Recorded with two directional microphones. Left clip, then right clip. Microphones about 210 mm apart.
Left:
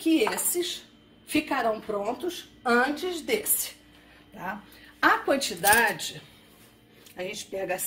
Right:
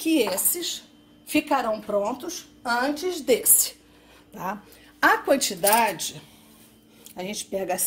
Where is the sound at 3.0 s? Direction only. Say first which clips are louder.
Right 3 dB; 55° right (ahead or behind).